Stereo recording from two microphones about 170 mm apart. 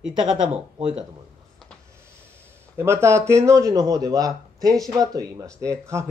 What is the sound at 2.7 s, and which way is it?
Speech, 15° right (ahead or behind).